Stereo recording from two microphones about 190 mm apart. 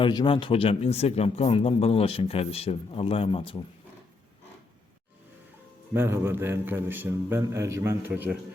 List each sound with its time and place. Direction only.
0.0 s speech: 25° left (ahead or behind)
5.9 s a man's voice: 10° right (ahead or behind)